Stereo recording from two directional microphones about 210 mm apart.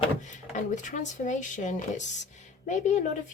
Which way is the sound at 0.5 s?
35° left (ahead or behind).